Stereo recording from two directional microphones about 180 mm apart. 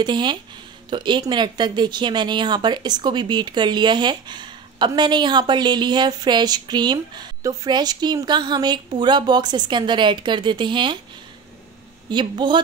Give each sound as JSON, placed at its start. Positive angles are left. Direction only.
{"t": 0.0, "sound": "speech", "side_deg": -25}
{"t": 12.1, "sound": "speech", "side_deg": -25}